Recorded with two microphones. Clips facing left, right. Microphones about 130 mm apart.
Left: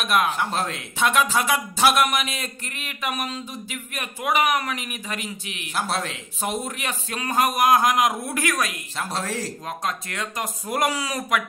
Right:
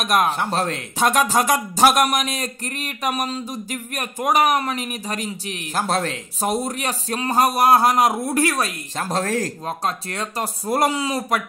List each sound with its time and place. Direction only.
0.0 s speech: 40° right (ahead or behind)
9.7 s speech: 35° right (ahead or behind)